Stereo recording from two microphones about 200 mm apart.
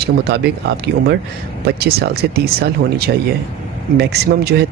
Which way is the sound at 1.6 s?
50° right (ahead or behind).